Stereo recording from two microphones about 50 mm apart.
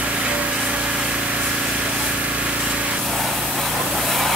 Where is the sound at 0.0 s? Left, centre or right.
Right.